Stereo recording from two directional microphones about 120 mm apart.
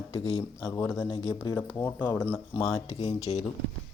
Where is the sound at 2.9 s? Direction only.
60° left (ahead or behind).